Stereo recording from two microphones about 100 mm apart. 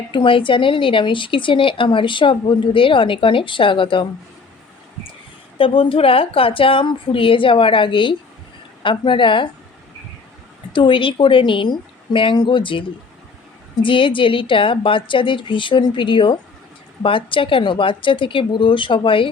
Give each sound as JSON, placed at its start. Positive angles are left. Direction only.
{"t": 0.1, "sound": "speech", "side_deg": 55}
{"t": 5.5, "sound": "speech", "side_deg": 65}
{"t": 10.7, "sound": "speech", "side_deg": 55}